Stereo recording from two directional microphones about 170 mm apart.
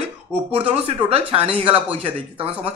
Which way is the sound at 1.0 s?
35° right (ahead or behind).